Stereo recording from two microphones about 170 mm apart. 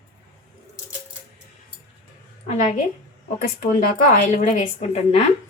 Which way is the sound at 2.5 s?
40° left (ahead or behind).